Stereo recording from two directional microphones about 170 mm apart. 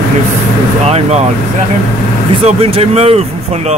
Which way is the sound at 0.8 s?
40° right (ahead or behind).